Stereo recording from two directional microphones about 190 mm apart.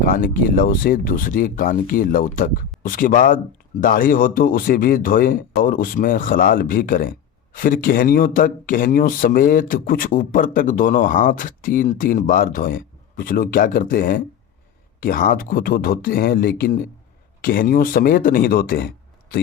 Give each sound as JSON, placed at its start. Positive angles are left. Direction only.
{"t": 0.0, "sound": "speech", "side_deg": 45}